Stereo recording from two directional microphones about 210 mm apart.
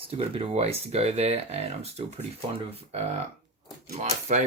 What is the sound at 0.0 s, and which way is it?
Speech, 25° right (ahead or behind).